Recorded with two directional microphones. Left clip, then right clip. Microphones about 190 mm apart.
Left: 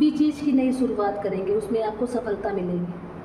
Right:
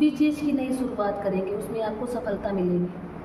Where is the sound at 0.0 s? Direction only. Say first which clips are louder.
Left 1 dB; 35° left (ahead or behind).